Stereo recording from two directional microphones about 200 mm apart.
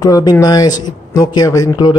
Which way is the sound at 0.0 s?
20° left (ahead or behind).